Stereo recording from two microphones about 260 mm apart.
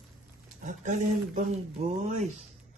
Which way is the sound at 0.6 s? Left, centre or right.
Right.